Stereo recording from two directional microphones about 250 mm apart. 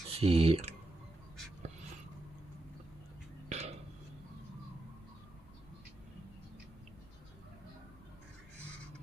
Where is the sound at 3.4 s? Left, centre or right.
Right.